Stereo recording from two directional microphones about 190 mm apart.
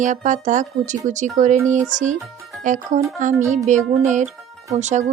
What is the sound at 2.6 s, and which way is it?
Speech, 40° right (ahead or behind).